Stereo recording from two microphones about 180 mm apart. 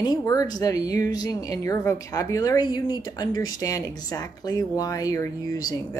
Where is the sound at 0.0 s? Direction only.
20° left (ahead or behind).